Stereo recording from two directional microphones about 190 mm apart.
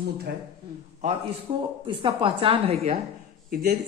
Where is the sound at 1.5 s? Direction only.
25° right (ahead or behind).